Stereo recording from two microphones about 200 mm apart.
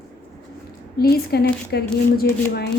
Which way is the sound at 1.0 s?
50° left (ahead or behind).